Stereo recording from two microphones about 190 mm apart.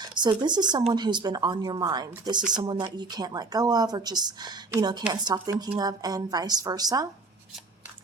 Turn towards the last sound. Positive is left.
turn(degrees=-20)  # may be behind; listen again after turning